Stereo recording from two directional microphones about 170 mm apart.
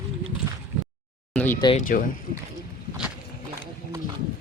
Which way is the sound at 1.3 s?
10° left (ahead or behind).